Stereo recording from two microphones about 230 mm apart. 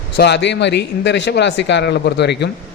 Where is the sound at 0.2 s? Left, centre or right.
Left.